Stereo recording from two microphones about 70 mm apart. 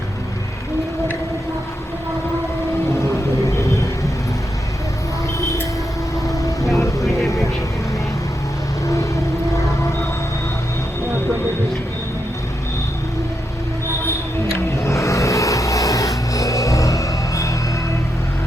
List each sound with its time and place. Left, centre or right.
3.0 s vehicle: left
6.2 s vehicle: left
7.0 s vehicle: centre
8.9 s a sound: left
14.8 s vehicle: left